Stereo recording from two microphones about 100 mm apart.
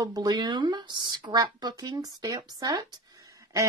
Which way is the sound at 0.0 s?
40° right (ahead or behind).